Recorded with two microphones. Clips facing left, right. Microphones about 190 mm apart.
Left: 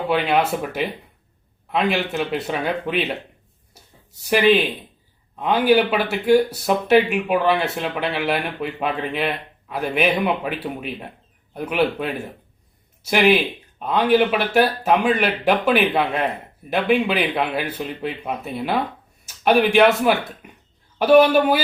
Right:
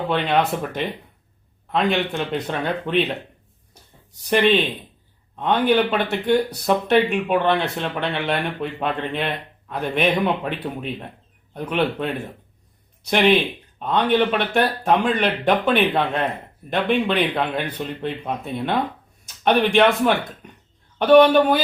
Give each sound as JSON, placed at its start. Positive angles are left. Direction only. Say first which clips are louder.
{"t": 0.1, "sound": "speech", "louder": "left 1 dB", "side_deg": 5}